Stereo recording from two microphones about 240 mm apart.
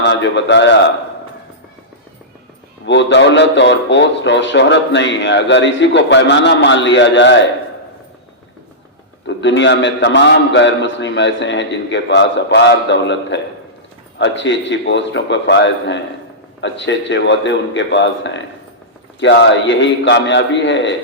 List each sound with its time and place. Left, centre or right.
0.0 s a man's voice: left
2.8 s a man's voice: left
9.2 s a man's voice: left